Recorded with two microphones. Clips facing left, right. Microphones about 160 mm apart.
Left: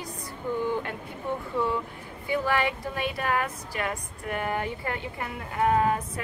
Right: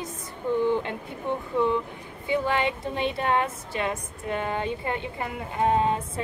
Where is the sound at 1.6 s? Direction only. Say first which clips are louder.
Right 5 dB; 20° right (ahead or behind).